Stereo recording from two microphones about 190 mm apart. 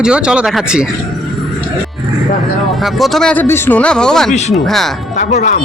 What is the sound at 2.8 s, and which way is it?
Speech, centre (ahead or behind).